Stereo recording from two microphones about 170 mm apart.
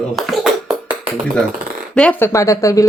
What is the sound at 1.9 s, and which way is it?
Speech, 10° left (ahead or behind).